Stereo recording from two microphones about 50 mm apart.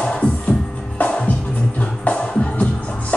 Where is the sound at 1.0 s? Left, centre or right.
Left.